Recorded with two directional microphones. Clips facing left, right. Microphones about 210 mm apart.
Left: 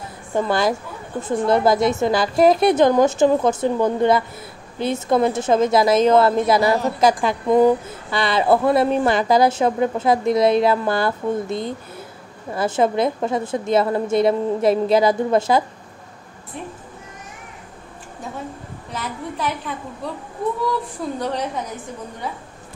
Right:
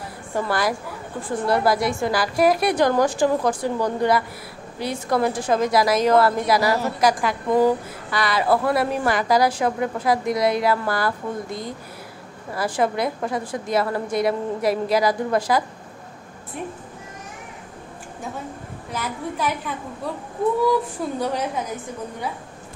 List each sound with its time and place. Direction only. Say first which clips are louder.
0.3 s speech: left 4 dB; 20° left (ahead or behind)
18.9 s a woman's voice: right 1 dB; centre (ahead or behind)
21.2 s a woman's voice: even; 5° right (ahead or behind)